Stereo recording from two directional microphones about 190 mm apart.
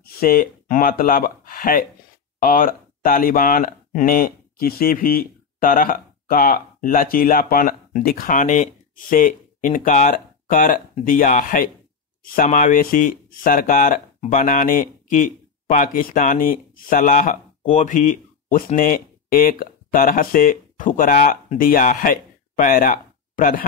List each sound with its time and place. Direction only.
0.0 s speech: 50° left (ahead or behind)